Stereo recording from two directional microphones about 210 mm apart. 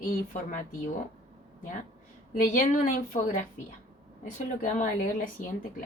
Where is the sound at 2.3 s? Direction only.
40° left (ahead or behind).